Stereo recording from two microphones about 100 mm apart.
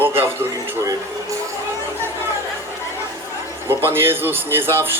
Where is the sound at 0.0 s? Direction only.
20° right (ahead or behind).